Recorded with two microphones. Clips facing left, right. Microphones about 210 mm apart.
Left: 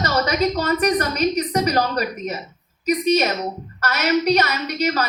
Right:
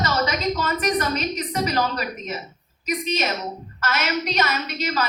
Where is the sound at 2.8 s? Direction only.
40° left (ahead or behind).